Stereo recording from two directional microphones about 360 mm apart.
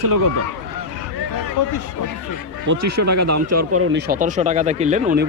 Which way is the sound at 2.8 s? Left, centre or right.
Right.